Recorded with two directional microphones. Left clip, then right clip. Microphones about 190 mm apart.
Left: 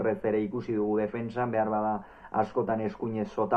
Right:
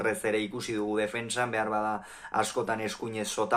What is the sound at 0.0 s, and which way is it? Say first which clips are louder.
Speech: left 1 dB; 20° right (ahead or behind).